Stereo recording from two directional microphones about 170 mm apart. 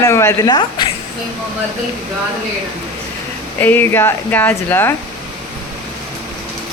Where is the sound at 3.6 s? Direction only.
10° left (ahead or behind).